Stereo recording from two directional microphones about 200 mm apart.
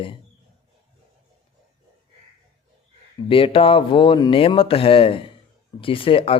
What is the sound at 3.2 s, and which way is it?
Speech, 25° left (ahead or behind).